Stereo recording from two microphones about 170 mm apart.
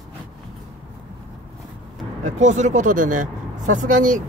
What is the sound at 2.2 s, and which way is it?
Speech, 45° right (ahead or behind).